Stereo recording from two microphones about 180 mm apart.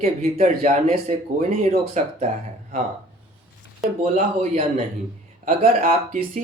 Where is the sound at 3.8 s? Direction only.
40° right (ahead or behind).